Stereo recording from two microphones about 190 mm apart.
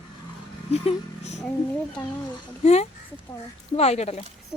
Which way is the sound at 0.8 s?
35° left (ahead or behind).